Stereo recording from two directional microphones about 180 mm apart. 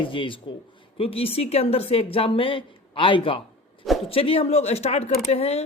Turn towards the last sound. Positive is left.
turn(degrees=35)  # may be behind; listen again after turning